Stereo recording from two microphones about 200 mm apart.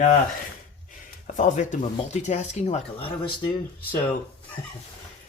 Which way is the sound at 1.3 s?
40° left (ahead or behind).